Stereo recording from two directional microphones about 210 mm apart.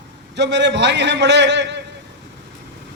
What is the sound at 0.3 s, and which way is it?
A man's voice, 55° right (ahead or behind).